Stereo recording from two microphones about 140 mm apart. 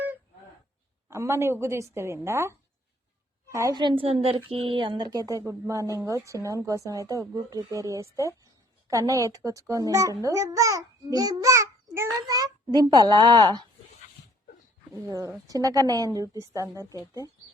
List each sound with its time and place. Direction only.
1.1 s a child's voice: 20° right (ahead or behind)
3.8 s a woman's voice: 35° right (ahead or behind)
15.0 s a child's voice: 25° right (ahead or behind)